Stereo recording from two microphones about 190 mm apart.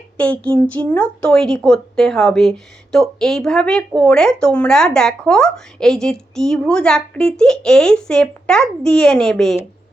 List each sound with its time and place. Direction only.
0.2 s speech: 5° left (ahead or behind)